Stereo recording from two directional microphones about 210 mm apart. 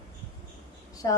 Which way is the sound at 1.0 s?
15° left (ahead or behind).